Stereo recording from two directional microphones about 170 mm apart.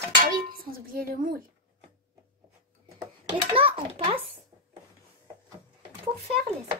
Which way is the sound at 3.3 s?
30° right (ahead or behind).